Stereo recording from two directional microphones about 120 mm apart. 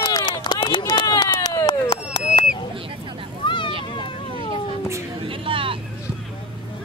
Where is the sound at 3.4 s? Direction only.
45° left (ahead or behind).